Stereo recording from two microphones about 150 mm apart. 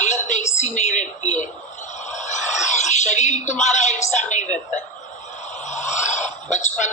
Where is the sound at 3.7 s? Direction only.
50° left (ahead or behind).